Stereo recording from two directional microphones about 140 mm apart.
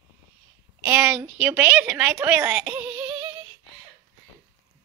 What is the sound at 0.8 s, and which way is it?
A woman's voice, 15° right (ahead or behind).